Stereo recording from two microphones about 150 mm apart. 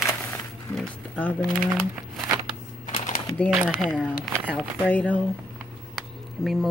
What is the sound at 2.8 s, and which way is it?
Typing, 40° left (ahead or behind).